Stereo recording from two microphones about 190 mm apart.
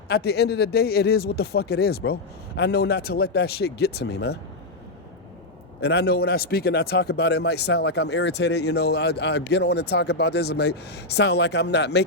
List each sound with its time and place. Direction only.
0.1 s speech: 60° left (ahead or behind)
5.8 s speech: 60° left (ahead or behind)